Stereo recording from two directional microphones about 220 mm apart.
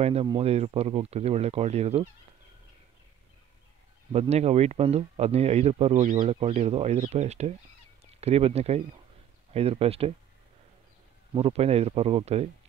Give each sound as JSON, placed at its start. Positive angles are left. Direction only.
{"t": 0.0, "sound": "speech", "side_deg": -30}
{"t": 4.1, "sound": "speech", "side_deg": -30}
{"t": 11.3, "sound": "speech", "side_deg": -25}